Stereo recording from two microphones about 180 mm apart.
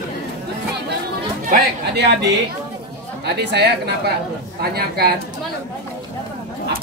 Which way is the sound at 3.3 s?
70° right (ahead or behind).